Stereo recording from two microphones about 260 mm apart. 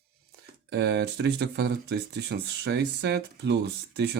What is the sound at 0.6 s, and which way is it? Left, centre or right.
Speech, right.